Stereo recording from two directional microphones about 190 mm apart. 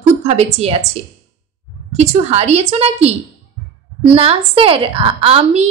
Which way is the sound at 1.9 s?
35° right (ahead or behind).